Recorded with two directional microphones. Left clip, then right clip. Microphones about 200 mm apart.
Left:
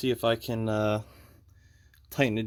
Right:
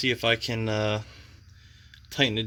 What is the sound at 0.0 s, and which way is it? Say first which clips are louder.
Speech: right 2 dB; 30° left (ahead or behind).